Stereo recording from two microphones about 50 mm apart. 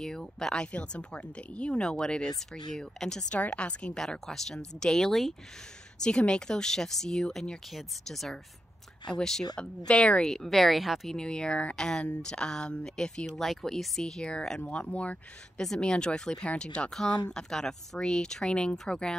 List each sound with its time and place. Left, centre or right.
0.0 s speech: centre
0.7 s speech: left
4.3 s speech: centre
6.0 s speech: centre
9.8 s speech: left
10.2 s speech: centre
11.1 s speech: centre; by 15.1 s left
15.5 s speech: centre